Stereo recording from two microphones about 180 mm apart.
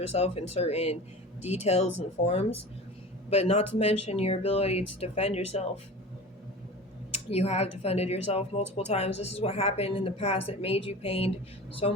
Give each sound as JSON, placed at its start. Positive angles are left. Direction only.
{"t": 0.0, "sound": "a woman's voice", "side_deg": 35}
{"t": 7.3, "sound": "a woman's voice", "side_deg": 35}